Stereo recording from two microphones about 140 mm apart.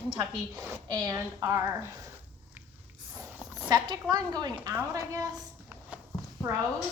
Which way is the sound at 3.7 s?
30° right (ahead or behind).